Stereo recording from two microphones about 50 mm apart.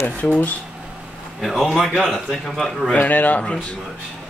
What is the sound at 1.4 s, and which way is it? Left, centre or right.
A man's voice, centre.